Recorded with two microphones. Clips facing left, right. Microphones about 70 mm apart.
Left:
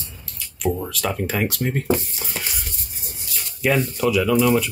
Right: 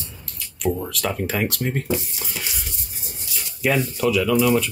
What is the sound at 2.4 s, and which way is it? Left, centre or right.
Stir, left.